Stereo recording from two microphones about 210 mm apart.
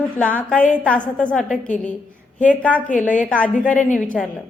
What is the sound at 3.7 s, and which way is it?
Speech, 35° left (ahead or behind).